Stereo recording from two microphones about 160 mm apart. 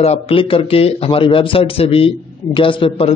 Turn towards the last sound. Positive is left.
turn(degrees=35)  # may be behind; listen again after turning